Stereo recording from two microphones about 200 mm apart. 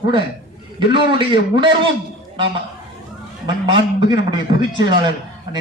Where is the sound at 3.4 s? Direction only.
25° right (ahead or behind).